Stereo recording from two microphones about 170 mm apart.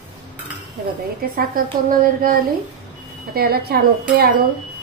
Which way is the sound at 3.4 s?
65° right (ahead or behind).